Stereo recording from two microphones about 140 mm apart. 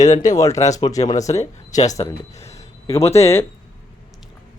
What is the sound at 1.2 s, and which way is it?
Speech, 55° left (ahead or behind).